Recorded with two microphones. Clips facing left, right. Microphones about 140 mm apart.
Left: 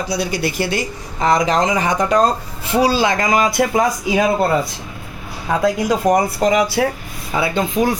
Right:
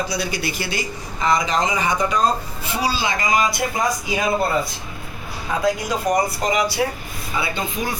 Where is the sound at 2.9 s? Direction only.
55° left (ahead or behind).